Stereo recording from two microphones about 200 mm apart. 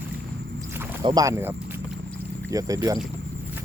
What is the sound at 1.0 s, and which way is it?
Speech, 15° right (ahead or behind).